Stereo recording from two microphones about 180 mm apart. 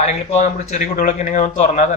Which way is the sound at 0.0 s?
40° left (ahead or behind).